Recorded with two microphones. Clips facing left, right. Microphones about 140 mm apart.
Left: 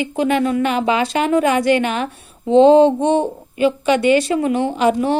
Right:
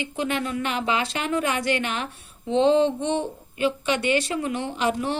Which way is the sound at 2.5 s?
45° left (ahead or behind).